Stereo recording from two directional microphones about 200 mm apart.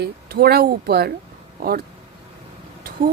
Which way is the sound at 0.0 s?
50° right (ahead or behind).